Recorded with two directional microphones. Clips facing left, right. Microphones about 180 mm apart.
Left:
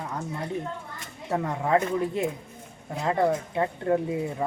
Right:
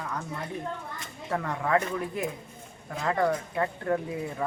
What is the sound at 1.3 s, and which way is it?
Speech, 20° left (ahead or behind).